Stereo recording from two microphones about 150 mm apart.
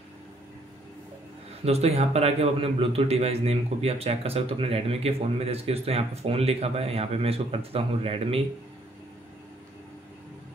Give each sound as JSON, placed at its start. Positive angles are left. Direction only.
{"t": 1.6, "sound": "a man's voice", "side_deg": -45}